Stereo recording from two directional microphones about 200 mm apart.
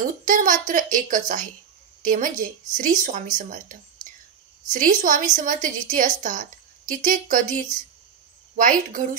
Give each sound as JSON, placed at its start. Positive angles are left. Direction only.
{"t": 0.0, "sound": "a woman's voice", "side_deg": -40}
{"t": 8.5, "sound": "speech", "side_deg": -40}